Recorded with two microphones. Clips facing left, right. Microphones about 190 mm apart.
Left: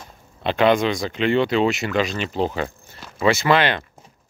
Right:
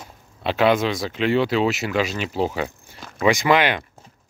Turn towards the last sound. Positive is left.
turn(degrees=-15)  # may be behind; listen again after turning